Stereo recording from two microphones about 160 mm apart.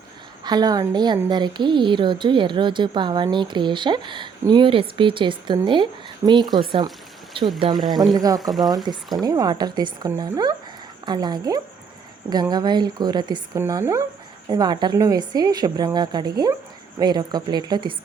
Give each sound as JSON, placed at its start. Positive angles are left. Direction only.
{"t": 0.4, "sound": "a woman's voice", "side_deg": -25}
{"t": 8.4, "sound": "speech", "side_deg": 0}
{"t": 8.6, "sound": "a woman's voice", "side_deg": -25}